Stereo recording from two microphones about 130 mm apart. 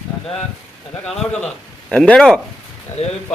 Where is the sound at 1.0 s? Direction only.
5° left (ahead or behind).